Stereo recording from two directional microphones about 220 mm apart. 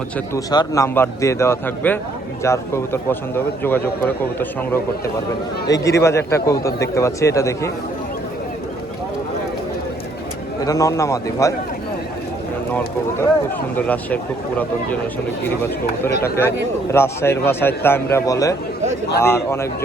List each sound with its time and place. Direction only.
0.3 s a man's voice: 15° left (ahead or behind)
10.6 s a man's voice: 15° left (ahead or behind)
13.7 s a man's voice: 5° left (ahead or behind)
15.4 s a man's voice: 10° left (ahead or behind)